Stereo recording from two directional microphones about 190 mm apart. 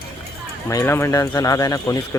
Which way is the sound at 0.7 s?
15° left (ahead or behind).